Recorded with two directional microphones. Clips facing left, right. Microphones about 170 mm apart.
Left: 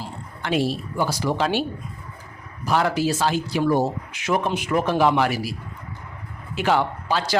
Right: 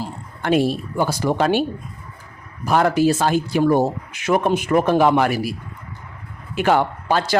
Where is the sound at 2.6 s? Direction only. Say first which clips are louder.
Right 5 dB; 50° right (ahead or behind).